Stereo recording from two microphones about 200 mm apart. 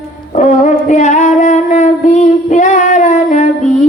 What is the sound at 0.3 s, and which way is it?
Music, 35° left (ahead or behind).